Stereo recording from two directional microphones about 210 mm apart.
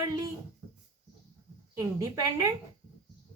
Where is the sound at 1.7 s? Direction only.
15° right (ahead or behind).